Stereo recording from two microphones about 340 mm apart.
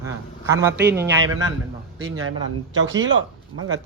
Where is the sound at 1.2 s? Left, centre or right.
Right.